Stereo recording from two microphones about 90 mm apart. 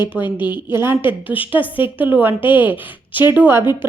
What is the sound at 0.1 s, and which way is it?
A woman's voice, 15° right (ahead or behind).